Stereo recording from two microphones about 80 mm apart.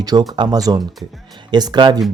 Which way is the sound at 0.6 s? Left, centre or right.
Right.